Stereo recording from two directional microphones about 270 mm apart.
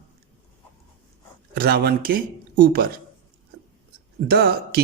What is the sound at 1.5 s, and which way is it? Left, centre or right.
Speech, right.